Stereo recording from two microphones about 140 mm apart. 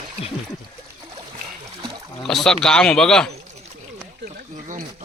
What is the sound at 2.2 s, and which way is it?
Speech, 5° left (ahead or behind).